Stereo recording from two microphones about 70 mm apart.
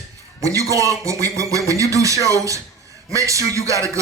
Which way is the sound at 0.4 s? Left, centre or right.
Right.